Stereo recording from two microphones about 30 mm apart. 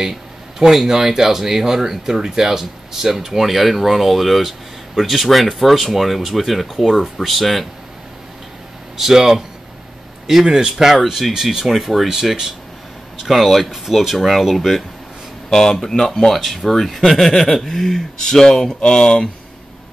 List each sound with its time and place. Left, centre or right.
0.0 s a sound: centre
0.8 s speech: centre
8.9 s speech: centre
10.4 s speech: centre
11.4 s speech: centre
15.5 s speech: centre
18.8 s speech: left